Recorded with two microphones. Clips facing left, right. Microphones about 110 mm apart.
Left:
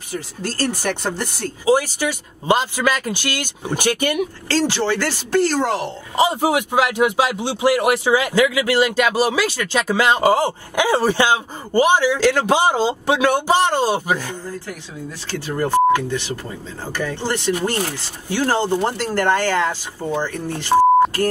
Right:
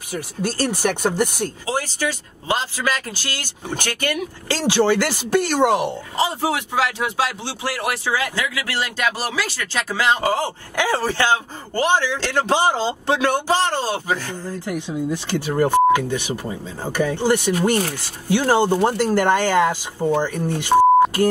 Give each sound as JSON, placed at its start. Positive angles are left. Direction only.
{"t": 0.4, "sound": "speech", "side_deg": -15}
{"t": 1.7, "sound": "a man's voice", "side_deg": 15}
{"t": 4.5, "sound": "speech", "side_deg": -15}
{"t": 6.1, "sound": "a man's voice", "side_deg": 15}
{"t": 14.7, "sound": "speech", "side_deg": -15}